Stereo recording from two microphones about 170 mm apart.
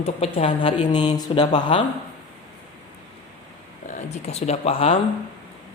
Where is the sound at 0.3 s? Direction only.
35° left (ahead or behind).